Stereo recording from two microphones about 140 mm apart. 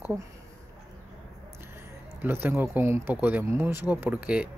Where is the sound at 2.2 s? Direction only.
15° right (ahead or behind).